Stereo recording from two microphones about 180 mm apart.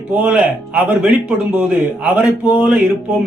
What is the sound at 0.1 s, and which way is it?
A man's voice, 5° right (ahead or behind).